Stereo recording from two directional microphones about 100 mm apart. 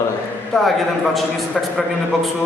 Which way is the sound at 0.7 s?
Centre (ahead or behind).